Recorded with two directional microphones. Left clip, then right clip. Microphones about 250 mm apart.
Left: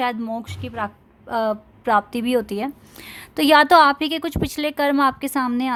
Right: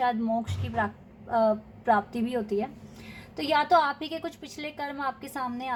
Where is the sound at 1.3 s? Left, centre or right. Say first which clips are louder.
Left 2 dB; left.